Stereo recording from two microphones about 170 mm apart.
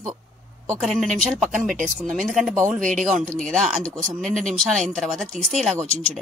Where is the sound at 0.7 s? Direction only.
Centre (ahead or behind).